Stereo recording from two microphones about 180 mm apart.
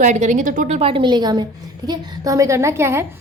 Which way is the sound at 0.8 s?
30° right (ahead or behind).